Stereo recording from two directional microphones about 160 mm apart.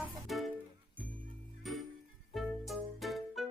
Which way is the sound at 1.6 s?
Centre (ahead or behind).